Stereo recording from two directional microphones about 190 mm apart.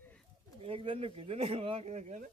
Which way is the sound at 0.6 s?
30° right (ahead or behind).